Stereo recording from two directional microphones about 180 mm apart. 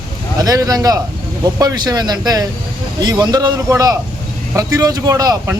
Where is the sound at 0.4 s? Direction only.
20° right (ahead or behind).